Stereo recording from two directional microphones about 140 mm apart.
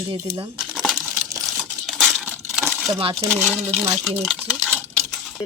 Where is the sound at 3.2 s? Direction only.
15° right (ahead or behind).